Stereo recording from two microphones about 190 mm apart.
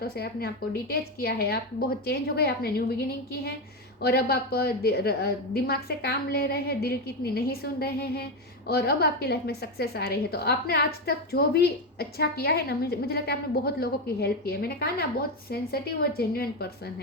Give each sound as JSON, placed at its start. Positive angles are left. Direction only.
{"t": 0.0, "sound": "a woman's voice", "side_deg": 55}
{"t": 4.0, "sound": "a woman's voice", "side_deg": 55}